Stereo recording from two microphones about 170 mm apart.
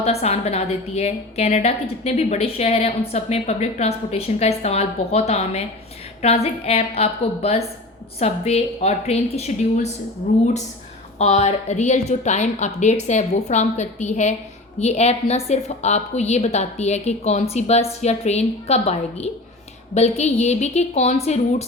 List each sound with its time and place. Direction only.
0.0 s a woman's voice: 40° left (ahead or behind)
11.2 s a woman's voice: 40° left (ahead or behind)